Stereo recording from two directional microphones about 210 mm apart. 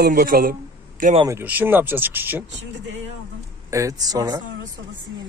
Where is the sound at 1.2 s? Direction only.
10° right (ahead or behind).